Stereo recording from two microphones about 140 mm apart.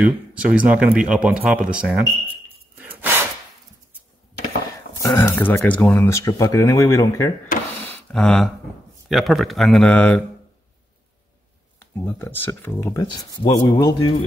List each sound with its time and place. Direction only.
0.0 s speech: 10° right (ahead or behind)
2.8 s breathing: 15° right (ahead or behind)
5.0 s speech: 15° left (ahead or behind)
8.1 s speech: 5° left (ahead or behind)
12.0 s speech: 15° left (ahead or behind)